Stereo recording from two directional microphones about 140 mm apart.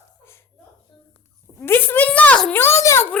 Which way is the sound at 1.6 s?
15° left (ahead or behind).